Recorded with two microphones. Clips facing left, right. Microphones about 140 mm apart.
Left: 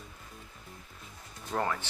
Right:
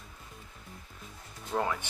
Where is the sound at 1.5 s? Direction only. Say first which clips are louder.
Right 1 dB; 10° right (ahead or behind).